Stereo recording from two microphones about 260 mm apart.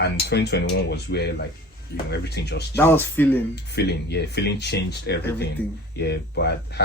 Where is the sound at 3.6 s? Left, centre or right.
Left.